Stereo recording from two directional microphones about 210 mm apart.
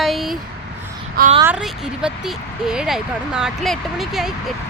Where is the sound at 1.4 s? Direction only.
5° right (ahead or behind).